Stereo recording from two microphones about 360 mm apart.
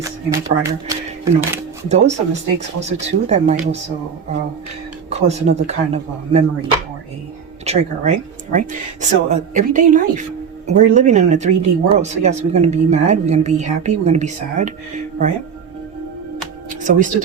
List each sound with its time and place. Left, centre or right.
0.0 s speech: centre
5.0 s speech: centre
7.6 s speech: centre
16.8 s speech: right